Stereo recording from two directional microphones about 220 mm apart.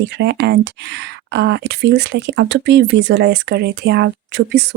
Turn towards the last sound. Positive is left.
turn(degrees=-45)  # may be behind; listen again after turning